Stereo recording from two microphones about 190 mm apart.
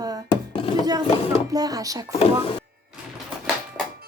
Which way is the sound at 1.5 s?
20° right (ahead or behind).